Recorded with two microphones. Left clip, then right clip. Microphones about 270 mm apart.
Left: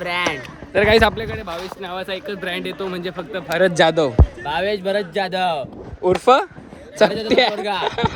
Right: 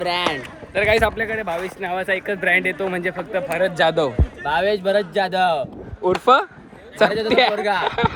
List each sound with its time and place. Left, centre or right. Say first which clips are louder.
0.0 s a sound: even; centre
0.7 s a man's voice: left 3 dB; left
1.1 s speech: right 4 dB; centre